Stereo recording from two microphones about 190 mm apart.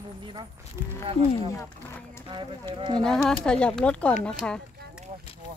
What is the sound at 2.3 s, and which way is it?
Speech, 20° right (ahead or behind).